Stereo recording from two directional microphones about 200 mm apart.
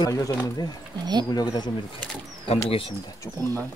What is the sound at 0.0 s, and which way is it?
Speech, 15° left (ahead or behind).